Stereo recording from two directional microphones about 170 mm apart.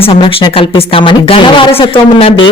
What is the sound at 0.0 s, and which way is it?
A man's voice, 30° left (ahead or behind).